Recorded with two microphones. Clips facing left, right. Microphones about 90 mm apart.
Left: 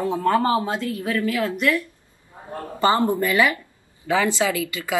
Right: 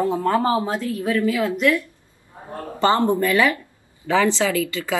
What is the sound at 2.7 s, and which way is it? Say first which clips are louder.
Speech: right 1 dB; 10° left (ahead or behind).